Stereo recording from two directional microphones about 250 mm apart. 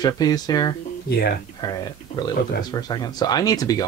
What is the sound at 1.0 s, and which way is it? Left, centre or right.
Speech, left.